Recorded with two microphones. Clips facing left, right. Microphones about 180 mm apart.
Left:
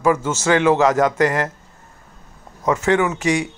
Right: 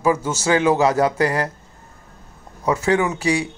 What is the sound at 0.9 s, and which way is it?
Speech, 35° right (ahead or behind).